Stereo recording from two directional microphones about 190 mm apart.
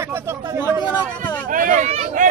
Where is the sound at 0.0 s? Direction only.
15° right (ahead or behind).